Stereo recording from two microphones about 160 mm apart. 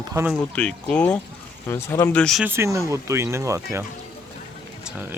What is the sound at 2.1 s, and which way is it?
Speech, 5° left (ahead or behind).